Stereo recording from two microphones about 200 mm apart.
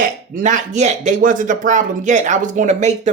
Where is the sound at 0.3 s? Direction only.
40° right (ahead or behind).